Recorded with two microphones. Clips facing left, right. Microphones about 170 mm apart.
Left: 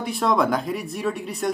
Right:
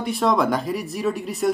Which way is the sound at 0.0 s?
Centre (ahead or behind).